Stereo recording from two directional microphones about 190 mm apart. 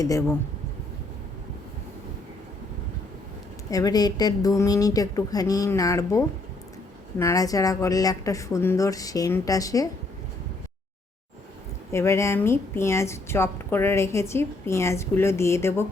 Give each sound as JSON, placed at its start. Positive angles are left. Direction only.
{"t": 0.0, "sound": "a woman's voice", "side_deg": 15}
{"t": 3.7, "sound": "a woman's voice", "side_deg": 20}
{"t": 11.9, "sound": "a woman's voice", "side_deg": 15}